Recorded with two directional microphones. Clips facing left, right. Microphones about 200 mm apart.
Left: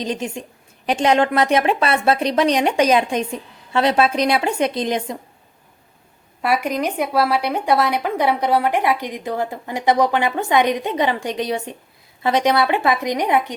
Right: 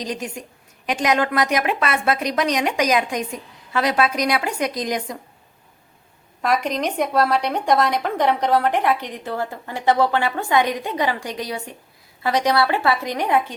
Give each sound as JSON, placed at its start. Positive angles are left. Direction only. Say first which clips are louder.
{"t": 0.0, "sound": "a woman's voice", "louder": "left 3 dB", "side_deg": 25}
{"t": 6.4, "sound": "a woman's voice", "louder": "left 1 dB", "side_deg": 10}